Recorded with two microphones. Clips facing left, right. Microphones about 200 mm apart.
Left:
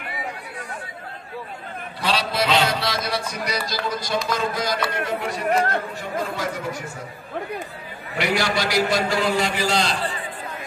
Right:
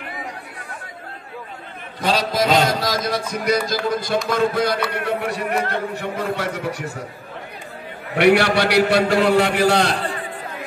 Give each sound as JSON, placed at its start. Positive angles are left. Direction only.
{"t": 2.1, "sound": "speech", "side_deg": -45}
{"t": 8.1, "sound": "speech", "side_deg": -65}